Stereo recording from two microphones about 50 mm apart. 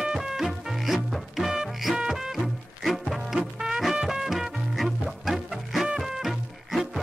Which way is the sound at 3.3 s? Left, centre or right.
Centre.